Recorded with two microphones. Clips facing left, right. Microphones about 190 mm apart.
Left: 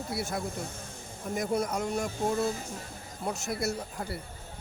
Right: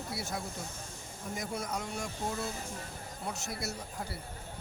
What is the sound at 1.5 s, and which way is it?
Speech, 45° left (ahead or behind).